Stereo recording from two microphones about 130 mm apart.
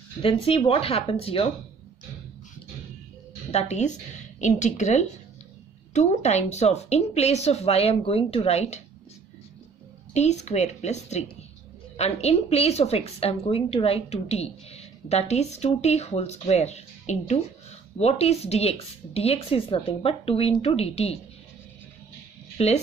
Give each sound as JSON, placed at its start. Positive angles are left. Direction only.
{"t": 0.2, "sound": "a woman's voice", "side_deg": 45}
{"t": 3.5, "sound": "a woman's voice", "side_deg": 65}
{"t": 10.1, "sound": "a woman's voice", "side_deg": 60}
{"t": 22.6, "sound": "a woman's voice", "side_deg": 50}